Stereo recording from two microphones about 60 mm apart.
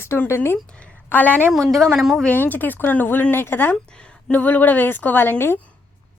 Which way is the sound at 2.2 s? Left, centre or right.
Left.